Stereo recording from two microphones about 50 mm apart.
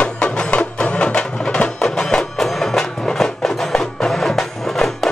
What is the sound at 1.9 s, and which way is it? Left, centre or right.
Music, centre.